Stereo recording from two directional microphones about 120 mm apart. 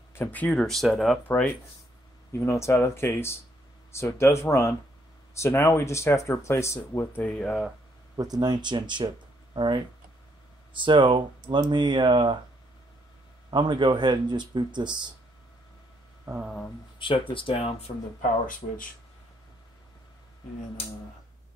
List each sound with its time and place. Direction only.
0.1 s speech: 15° left (ahead or behind)
1.2 s speech: 15° left (ahead or behind)
2.3 s speech: 25° left (ahead or behind)
8.2 s speech: 35° right (ahead or behind)
13.5 s speech: 40° right (ahead or behind)
17.0 s speech: 45° left (ahead or behind)